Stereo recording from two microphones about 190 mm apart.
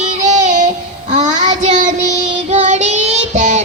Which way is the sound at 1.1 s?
40° right (ahead or behind).